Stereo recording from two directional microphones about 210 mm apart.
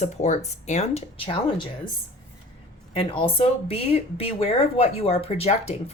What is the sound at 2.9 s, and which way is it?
Speech, 25° left (ahead or behind).